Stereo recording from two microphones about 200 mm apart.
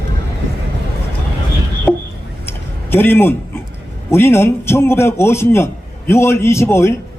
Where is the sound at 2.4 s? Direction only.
10° left (ahead or behind).